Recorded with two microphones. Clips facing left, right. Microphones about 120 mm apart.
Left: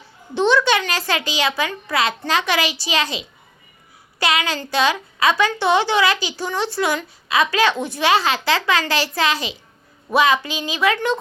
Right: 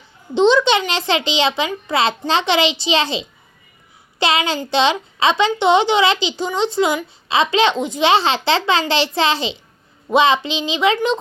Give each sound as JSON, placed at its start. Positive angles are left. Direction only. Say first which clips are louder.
{"t": 0.3, "sound": "a child's voice", "louder": "right 3 dB", "side_deg": -20}